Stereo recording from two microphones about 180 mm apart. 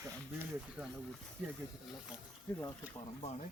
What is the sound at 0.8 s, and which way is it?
Speech, 10° right (ahead or behind).